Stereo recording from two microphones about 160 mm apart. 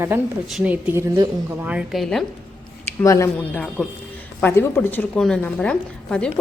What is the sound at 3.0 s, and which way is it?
A woman's voice, 20° left (ahead or behind).